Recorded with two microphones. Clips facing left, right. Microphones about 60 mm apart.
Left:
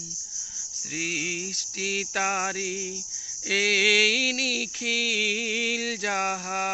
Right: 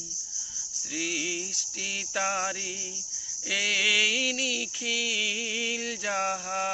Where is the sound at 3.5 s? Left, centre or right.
Left.